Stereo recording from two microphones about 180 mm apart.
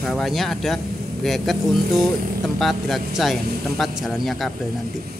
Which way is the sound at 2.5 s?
Centre (ahead or behind).